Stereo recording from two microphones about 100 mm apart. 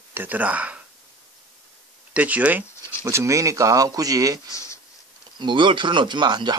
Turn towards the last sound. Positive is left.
turn(degrees=-50)  # may be behind; listen again after turning